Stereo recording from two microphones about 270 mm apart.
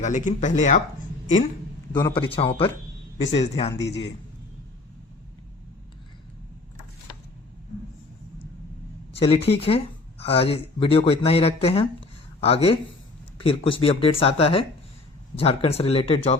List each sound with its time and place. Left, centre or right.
0.0 s speech: left
1.9 s speech: centre
3.8 s a man's voice: left
9.1 s speech: left